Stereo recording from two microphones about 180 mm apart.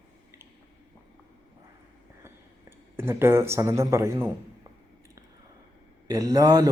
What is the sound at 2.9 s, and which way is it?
Speech, 15° right (ahead or behind).